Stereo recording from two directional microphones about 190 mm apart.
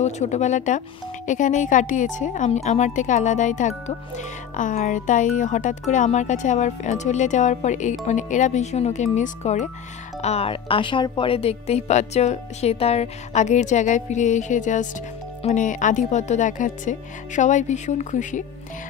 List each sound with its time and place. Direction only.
0.0 s speech: 35° left (ahead or behind)